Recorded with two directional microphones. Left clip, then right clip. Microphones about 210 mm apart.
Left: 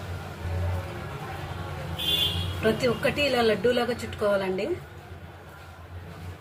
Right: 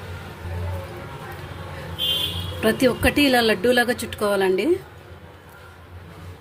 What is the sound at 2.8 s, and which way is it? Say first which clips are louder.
Speech: right 9 dB; 50° right (ahead or behind).